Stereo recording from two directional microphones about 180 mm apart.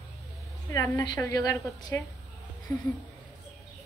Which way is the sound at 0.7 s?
20° left (ahead or behind).